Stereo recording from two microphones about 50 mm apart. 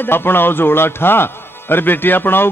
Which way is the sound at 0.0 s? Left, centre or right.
Left.